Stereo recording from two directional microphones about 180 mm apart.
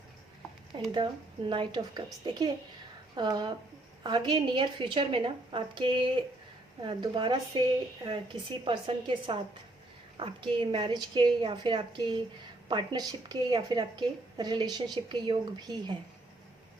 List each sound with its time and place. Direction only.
0.9 s a woman's voice: 25° right (ahead or behind)